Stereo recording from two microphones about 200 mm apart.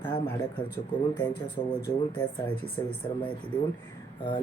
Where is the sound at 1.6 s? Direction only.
25° left (ahead or behind).